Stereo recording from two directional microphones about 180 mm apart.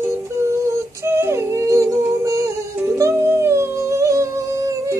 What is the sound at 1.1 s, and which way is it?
Humming, 15° right (ahead or behind).